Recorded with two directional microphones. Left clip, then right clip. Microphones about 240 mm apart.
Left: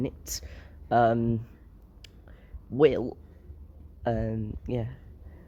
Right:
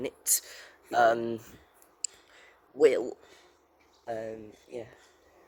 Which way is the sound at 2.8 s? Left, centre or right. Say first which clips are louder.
Left 1 dB; centre.